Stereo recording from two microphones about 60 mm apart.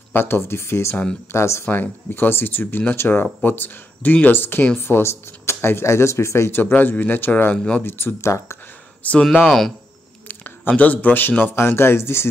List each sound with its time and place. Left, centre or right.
0.1 s speech: left
1.7 s speech: left
6.7 s speech: left
7.5 s speech: centre
7.8 s speech: left
8.2 s speech: left
9.0 s a man's voice: left
10.2 s a sound: left
10.7 s a man's voice: left